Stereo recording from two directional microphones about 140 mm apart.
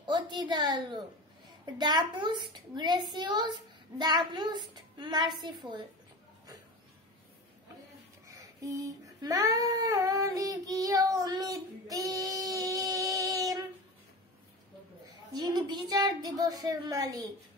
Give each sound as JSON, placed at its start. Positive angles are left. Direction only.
{"t": 0.0, "sound": "a woman's voice", "side_deg": -35}
{"t": 8.3, "sound": "a sound", "side_deg": -25}
{"t": 15.3, "sound": "speech", "side_deg": -30}